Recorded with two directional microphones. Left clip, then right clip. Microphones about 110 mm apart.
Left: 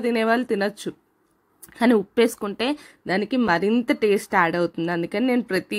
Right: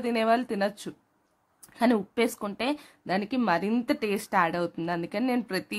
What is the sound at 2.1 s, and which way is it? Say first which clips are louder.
Speech: left 7 dB; 25° left (ahead or behind).